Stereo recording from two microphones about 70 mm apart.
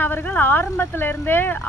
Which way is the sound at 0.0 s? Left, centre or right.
Left.